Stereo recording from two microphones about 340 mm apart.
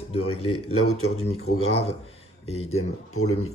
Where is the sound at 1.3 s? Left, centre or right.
Left.